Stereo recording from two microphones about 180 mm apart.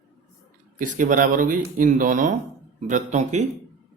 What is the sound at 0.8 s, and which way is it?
Speech, 50° right (ahead or behind).